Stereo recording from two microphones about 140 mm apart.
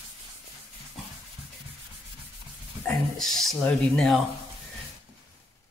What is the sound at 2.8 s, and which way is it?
Speech, 5° left (ahead or behind).